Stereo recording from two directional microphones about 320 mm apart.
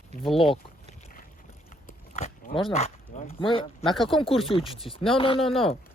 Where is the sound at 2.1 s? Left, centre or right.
Left.